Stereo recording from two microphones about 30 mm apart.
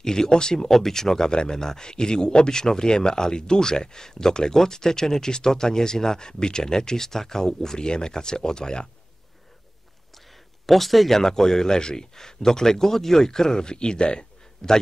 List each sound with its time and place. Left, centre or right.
0.0 s speech: left
0.7 s speech: centre
1.3 s speech: left
10.7 s speech: centre
11.1 s speech: centre; by 14.2 s left
14.6 s speech: centre